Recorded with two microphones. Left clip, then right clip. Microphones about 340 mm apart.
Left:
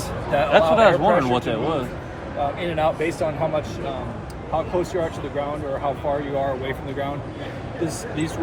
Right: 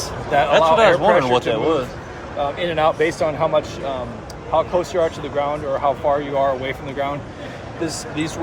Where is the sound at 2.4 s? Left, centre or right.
Right.